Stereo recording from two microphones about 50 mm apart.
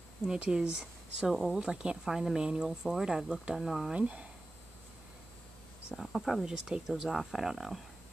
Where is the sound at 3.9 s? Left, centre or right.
Right.